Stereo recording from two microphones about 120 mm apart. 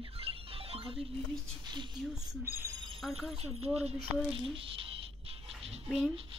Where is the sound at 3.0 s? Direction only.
Centre (ahead or behind).